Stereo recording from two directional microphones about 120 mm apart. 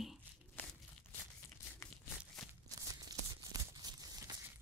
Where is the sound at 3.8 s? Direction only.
30° right (ahead or behind).